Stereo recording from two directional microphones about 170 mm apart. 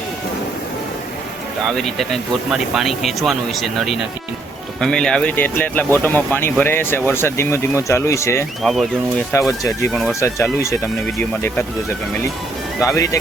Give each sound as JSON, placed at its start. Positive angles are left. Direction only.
{"t": 1.6, "sound": "speech", "side_deg": 0}
{"t": 8.6, "sound": "speech", "side_deg": 0}
{"t": 9.5, "sound": "speech", "side_deg": 20}
{"t": 9.9, "sound": "speech", "side_deg": 0}
{"t": 10.2, "sound": "speech", "side_deg": 15}
{"t": 12.8, "sound": "speech", "side_deg": 20}